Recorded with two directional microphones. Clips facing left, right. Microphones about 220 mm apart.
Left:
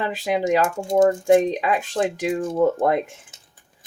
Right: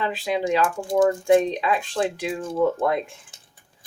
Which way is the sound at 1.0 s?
45° left (ahead or behind).